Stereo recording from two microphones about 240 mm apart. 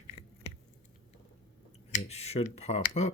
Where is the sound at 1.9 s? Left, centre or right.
Left.